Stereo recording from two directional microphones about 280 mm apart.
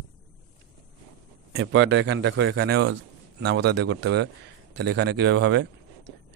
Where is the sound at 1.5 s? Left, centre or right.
Right.